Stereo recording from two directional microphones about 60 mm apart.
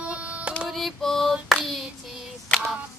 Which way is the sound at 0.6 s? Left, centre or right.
Centre.